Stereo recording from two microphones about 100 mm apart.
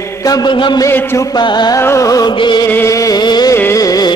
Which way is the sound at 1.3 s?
45° left (ahead or behind).